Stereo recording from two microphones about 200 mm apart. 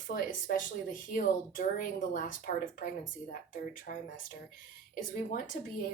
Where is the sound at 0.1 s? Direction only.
40° left (ahead or behind).